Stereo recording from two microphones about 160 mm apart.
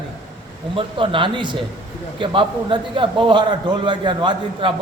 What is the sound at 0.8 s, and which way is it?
A man's voice, 30° right (ahead or behind).